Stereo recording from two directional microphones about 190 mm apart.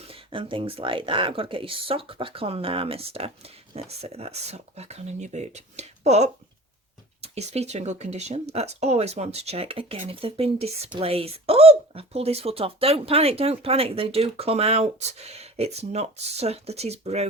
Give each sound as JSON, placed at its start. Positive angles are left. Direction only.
{"t": 0.1, "sound": "speech", "side_deg": -25}